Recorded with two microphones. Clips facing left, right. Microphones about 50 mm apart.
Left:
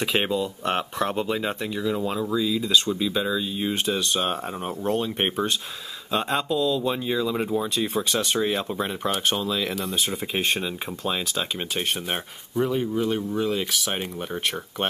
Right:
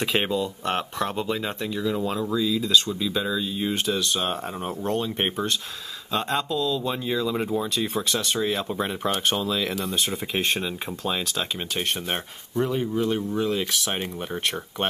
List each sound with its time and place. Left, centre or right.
0.0 s speech: centre
8.2 s speech: centre
8.5 s speech: centre